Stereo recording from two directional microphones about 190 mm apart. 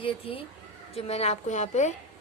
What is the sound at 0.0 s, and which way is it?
A woman's voice, 30° left (ahead or behind).